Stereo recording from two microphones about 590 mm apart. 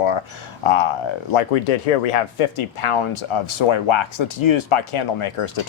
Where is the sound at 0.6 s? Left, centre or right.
Left.